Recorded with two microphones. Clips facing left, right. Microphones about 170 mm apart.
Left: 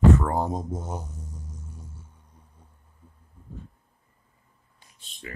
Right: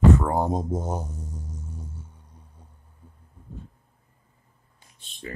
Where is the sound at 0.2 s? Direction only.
15° right (ahead or behind).